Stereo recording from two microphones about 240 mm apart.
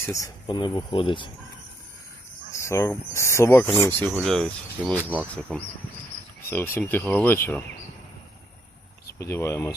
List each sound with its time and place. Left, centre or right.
0.0 s speech: centre
2.5 s speech: centre
9.1 s speech: centre